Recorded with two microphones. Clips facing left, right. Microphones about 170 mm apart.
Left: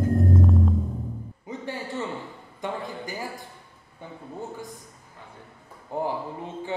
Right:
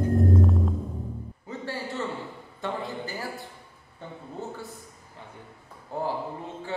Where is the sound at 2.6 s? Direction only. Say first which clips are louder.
Even; 15° left (ahead or behind).